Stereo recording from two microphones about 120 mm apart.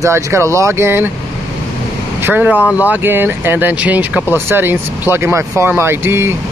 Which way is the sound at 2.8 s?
15° right (ahead or behind).